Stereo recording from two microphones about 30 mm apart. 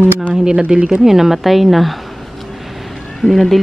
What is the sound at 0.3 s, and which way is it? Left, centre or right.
Speech, centre.